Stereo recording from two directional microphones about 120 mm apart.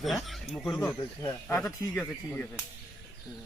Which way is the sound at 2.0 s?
15° left (ahead or behind).